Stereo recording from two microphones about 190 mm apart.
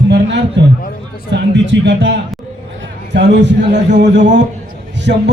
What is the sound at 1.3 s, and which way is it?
A man's voice, 70° right (ahead or behind).